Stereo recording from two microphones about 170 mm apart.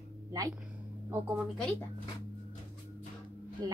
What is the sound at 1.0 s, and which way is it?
Speech, 10° right (ahead or behind).